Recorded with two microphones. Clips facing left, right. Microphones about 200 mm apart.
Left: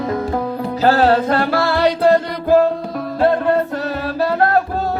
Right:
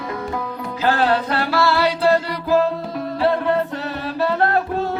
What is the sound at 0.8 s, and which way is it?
Music, 40° left (ahead or behind).